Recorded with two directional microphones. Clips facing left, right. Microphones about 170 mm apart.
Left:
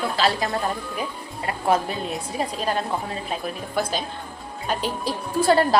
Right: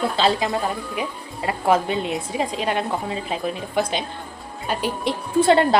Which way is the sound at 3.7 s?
20° right (ahead or behind).